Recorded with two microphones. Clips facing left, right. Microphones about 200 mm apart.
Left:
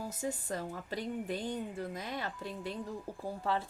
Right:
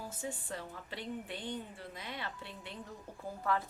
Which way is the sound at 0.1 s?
40° left (ahead or behind).